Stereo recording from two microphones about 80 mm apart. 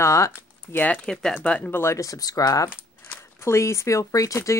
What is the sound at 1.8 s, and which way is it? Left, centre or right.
Speech, left.